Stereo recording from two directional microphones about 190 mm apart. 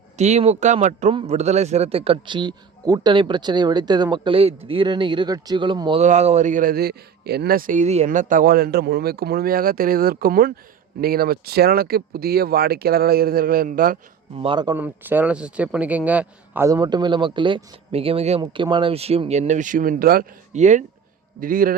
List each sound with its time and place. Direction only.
0.2 s a man's voice: 35° right (ahead or behind)
6.0 s speech: 35° right (ahead or behind)
14.3 s a man's voice: 25° right (ahead or behind)
14.8 s a man's voice: 10° right (ahead or behind); by 21.8 s 45° right (ahead or behind)